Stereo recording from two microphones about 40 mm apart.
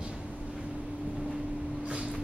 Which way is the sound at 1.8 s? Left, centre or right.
Right.